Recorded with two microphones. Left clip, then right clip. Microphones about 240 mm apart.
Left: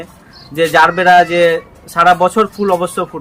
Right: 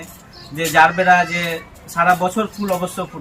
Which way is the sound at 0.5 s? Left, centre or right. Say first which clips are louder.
Left 3 dB; centre.